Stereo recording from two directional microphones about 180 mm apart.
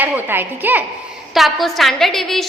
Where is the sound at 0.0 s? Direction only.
10° right (ahead or behind).